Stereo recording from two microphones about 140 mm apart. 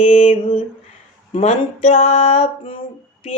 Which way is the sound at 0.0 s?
45° left (ahead or behind).